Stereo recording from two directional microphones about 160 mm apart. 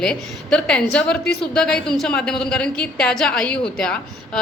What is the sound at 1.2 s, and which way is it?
Speech, 85° left.